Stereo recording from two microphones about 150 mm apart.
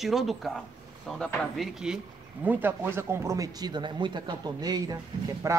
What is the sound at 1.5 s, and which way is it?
A man's voice, 5° right (ahead or behind).